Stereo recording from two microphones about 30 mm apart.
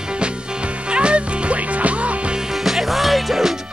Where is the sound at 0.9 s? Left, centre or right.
Right.